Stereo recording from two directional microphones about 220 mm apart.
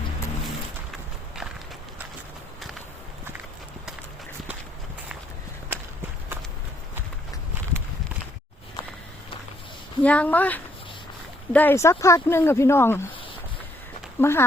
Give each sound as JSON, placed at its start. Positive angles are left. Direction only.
{"t": 5.7, "sound": "walk", "side_deg": -10}
{"t": 10.0, "sound": "speech", "side_deg": 5}
{"t": 14.2, "sound": "speech", "side_deg": 10}